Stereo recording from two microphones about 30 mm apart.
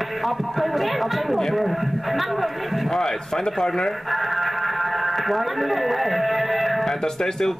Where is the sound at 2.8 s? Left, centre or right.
Centre.